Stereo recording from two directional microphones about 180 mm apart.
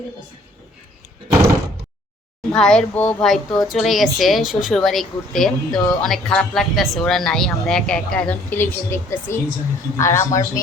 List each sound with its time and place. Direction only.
2.5 s a man's voice: 5° left (ahead or behind)